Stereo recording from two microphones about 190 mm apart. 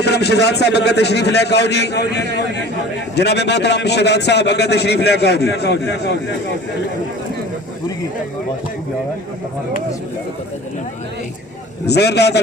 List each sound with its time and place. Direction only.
0.0 s a man's voice: 60° left (ahead or behind)
11.9 s a man's voice: 60° left (ahead or behind)